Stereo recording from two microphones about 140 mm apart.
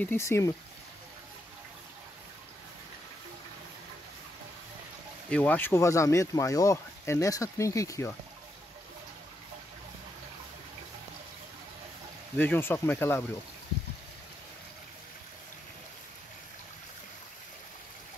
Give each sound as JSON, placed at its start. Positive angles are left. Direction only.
{"t": 0.0, "sound": "speech", "side_deg": 15}
{"t": 5.3, "sound": "speech", "side_deg": 10}
{"t": 12.4, "sound": "speech", "side_deg": 15}